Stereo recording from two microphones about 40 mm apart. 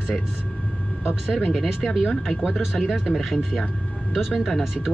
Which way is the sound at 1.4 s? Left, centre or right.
Centre.